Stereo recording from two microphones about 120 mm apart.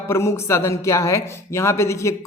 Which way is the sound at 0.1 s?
20° left (ahead or behind).